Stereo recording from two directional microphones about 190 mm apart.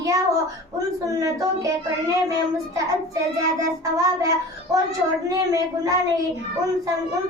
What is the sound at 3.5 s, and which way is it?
A child's voice, 15° right (ahead or behind).